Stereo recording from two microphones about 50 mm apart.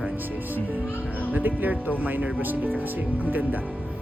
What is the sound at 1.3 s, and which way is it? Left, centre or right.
Speech, right.